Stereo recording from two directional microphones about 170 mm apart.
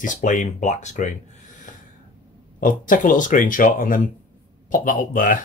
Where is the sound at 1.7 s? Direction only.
50° left (ahead or behind).